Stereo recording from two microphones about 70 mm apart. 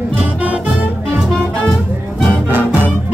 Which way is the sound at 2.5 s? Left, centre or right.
Right.